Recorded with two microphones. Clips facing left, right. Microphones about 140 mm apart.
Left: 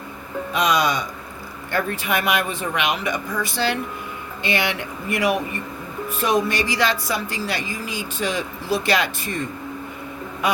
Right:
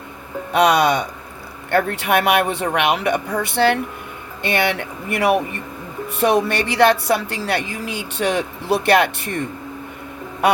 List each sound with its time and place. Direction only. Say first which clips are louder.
0.5 s speech: right 6 dB; 65° right (ahead or behind)
10.4 s quack: right 6 dB; 65° right (ahead or behind)